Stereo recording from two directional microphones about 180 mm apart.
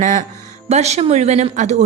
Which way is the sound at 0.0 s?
40° right (ahead or behind).